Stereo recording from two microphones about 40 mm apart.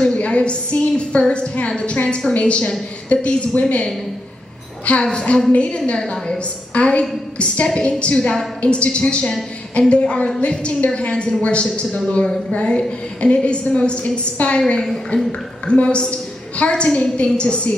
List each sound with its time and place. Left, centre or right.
0.1 s a woman's voice: left
5.1 s a woman's voice: left
5.9 s a woman's voice: centre